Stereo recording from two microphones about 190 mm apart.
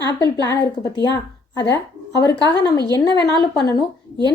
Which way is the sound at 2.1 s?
65° left (ahead or behind).